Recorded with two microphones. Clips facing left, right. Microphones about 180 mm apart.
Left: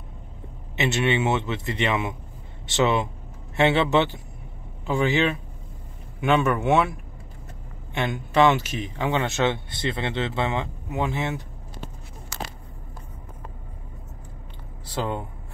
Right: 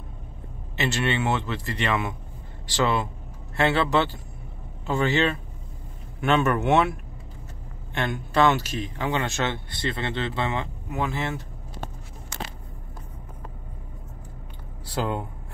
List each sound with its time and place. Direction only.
0.7 s speech: 20° left (ahead or behind)
7.9 s speech: 15° left (ahead or behind)